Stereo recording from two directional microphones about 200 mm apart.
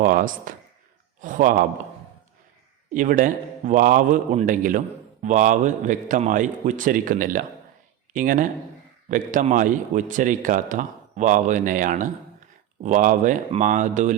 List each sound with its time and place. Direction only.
0.0 s a man's voice: 45° right (ahead or behind)
2.9 s a man's voice: 40° right (ahead or behind)